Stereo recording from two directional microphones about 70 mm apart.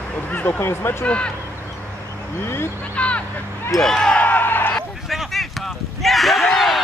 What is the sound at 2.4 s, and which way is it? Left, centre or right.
Speech, left.